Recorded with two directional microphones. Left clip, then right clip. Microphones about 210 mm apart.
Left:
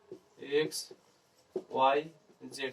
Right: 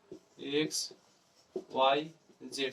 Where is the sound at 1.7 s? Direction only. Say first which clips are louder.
Left 1 dB; 50° right (ahead or behind).